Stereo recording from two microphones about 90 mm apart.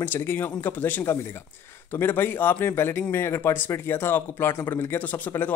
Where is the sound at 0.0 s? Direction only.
25° left (ahead or behind).